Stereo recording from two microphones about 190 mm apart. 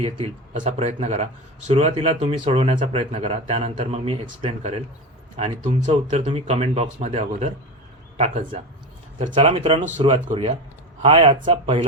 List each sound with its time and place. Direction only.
0.5 s speech: 40° right (ahead or behind)